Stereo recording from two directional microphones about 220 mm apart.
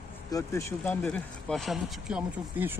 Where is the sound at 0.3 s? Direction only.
15° left (ahead or behind).